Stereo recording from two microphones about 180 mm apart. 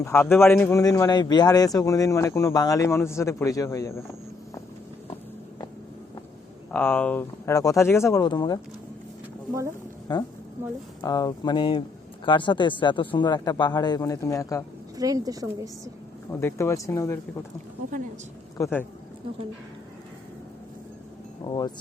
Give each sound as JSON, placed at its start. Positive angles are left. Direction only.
{"t": 0.0, "sound": "a man's voice", "side_deg": 15}
{"t": 6.7, "sound": "a man's voice", "side_deg": 10}
{"t": 10.1, "sound": "speech", "side_deg": 25}
{"t": 14.9, "sound": "a woman's voice", "side_deg": -20}
{"t": 16.4, "sound": "a man's voice", "side_deg": 15}
{"t": 18.5, "sound": "speech", "side_deg": 15}
{"t": 21.4, "sound": "speech", "side_deg": 25}